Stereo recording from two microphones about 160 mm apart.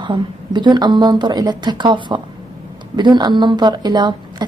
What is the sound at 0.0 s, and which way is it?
A woman's voice, 30° right (ahead or behind).